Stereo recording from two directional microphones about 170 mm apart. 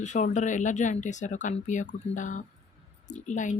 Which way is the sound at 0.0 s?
45° left (ahead or behind).